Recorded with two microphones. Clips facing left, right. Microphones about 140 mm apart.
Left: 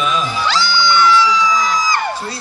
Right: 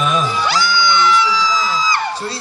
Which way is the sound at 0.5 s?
25° left (ahead or behind).